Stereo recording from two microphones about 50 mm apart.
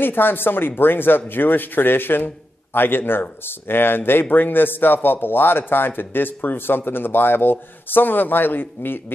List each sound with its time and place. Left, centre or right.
0.0 s speech: left